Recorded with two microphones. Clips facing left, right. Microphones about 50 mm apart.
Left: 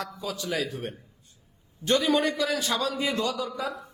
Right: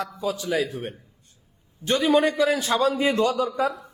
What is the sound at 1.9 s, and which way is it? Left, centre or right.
A man's voice, centre.